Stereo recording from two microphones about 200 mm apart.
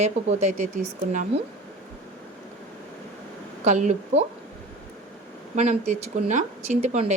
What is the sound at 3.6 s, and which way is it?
Speech, 35° right (ahead or behind).